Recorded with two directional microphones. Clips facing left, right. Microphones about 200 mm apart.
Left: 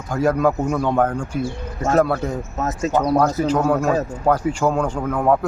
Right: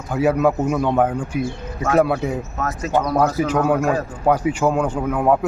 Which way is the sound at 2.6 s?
20° left (ahead or behind).